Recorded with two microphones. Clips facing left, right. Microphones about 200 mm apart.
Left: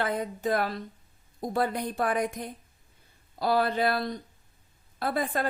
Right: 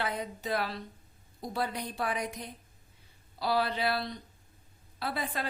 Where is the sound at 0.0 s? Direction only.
50° left (ahead or behind).